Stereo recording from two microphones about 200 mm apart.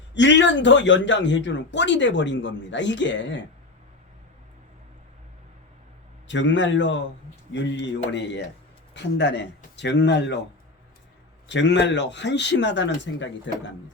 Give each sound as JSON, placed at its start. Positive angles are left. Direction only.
{"t": 0.1, "sound": "speech", "side_deg": 60}
{"t": 6.2, "sound": "speech", "side_deg": 65}
{"t": 11.4, "sound": "speech", "side_deg": 60}